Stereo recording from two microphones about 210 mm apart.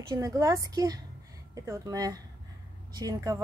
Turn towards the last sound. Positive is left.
turn(degrees=-15)  # may be behind; listen again after turning